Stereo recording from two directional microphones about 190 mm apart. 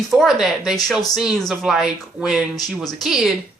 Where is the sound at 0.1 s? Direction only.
Centre (ahead or behind).